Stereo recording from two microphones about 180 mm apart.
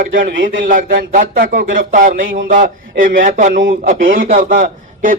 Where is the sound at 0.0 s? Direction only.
50° right (ahead or behind).